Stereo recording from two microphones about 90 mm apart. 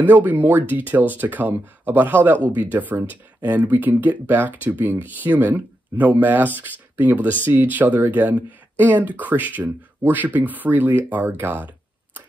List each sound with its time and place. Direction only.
0.0 s speech: 20° right (ahead or behind)